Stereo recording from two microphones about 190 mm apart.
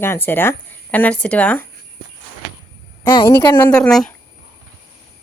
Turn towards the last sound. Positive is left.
turn(degrees=5)  # may be behind; listen again after turning